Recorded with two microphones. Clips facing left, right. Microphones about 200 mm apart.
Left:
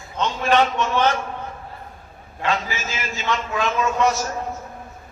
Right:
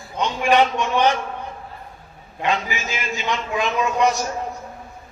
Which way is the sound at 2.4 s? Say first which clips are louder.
Right 1 dB; 15° right (ahead or behind).